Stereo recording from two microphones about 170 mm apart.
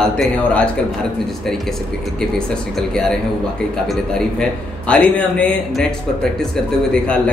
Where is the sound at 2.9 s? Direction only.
5° left (ahead or behind).